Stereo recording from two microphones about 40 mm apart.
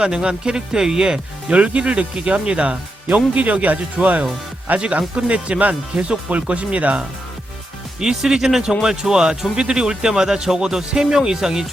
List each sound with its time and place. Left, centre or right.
0.0 s speech: centre; by 4.2 s right
4.8 s speech: right
7.9 s speech: centre